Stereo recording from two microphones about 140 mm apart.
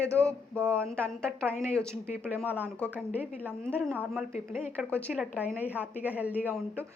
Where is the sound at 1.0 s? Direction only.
5° left (ahead or behind).